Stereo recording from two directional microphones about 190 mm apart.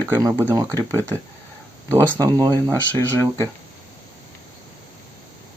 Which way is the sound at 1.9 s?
15° right (ahead or behind).